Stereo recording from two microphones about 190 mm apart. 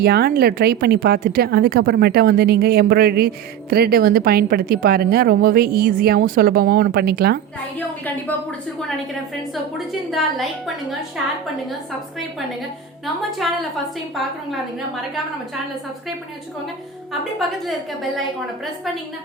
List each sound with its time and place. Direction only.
0.0 s speech: 55° right (ahead or behind)
9.7 s a woman's voice: centre (ahead or behind)
13.4 s a woman's voice: centre (ahead or behind)
18.2 s a woman's voice: centre (ahead or behind)